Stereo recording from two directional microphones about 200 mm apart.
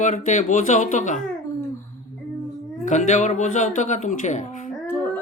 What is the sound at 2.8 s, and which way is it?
Speech, 35° left (ahead or behind).